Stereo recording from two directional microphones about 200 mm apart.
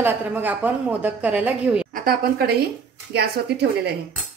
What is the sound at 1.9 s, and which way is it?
A woman's voice, 50° right (ahead or behind).